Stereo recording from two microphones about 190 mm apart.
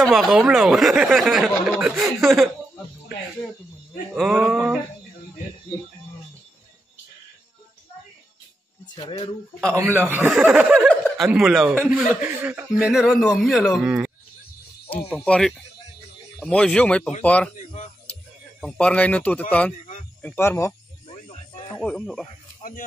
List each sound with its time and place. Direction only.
0.0 s speech: centre (ahead or behind)
4.1 s speech: centre (ahead or behind)
8.9 s speech: 25° left (ahead or behind)
9.8 s speech: 10° right (ahead or behind); by 17.5 s 5° left (ahead or behind)
18.6 s speech: 5° left (ahead or behind)
21.8 s speech: 5° left (ahead or behind)
22.6 s speech: 45° left (ahead or behind)